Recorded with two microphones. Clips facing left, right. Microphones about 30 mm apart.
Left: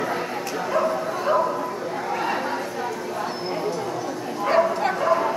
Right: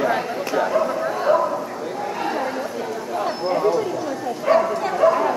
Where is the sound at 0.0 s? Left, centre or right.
Right.